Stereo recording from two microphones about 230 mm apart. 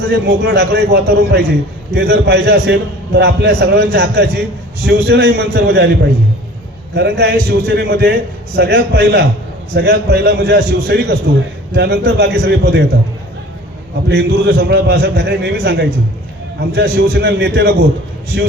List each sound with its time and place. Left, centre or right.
0.0 s a man's voice: right
14.1 s a man's voice: right